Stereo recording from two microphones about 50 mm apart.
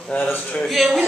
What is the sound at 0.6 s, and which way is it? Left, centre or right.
Speech, centre.